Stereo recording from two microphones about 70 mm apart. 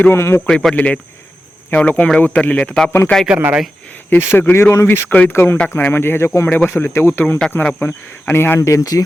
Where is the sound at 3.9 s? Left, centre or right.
Left.